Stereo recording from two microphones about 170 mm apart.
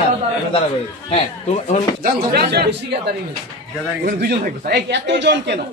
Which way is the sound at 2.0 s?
60° right (ahead or behind).